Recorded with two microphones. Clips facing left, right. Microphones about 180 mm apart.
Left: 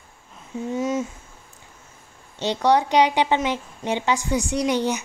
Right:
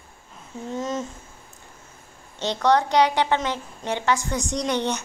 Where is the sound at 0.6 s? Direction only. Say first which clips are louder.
Left 4 dB; 10° left (ahead or behind).